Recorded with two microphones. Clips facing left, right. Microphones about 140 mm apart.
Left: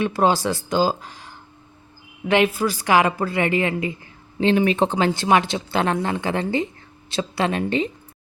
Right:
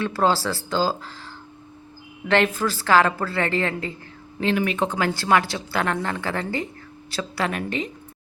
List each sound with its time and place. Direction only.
0.0 s a woman's voice: 15° left (ahead or behind)
2.2 s a woman's voice: 10° left (ahead or behind)
4.4 s a woman's voice: 30° left (ahead or behind)